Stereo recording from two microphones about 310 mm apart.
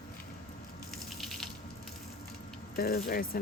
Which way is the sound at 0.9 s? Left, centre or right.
Centre.